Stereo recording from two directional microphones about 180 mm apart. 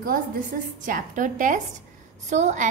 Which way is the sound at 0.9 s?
45° right (ahead or behind).